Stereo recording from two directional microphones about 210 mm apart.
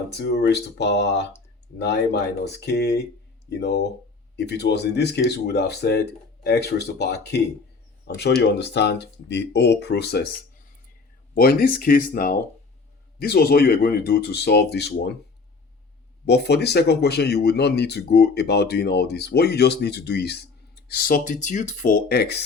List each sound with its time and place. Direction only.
0.1 s speech: 55° left (ahead or behind)
2.4 s speech: 55° left (ahead or behind)
11.3 s speech: 45° left (ahead or behind)
16.2 s speech: 50° left (ahead or behind)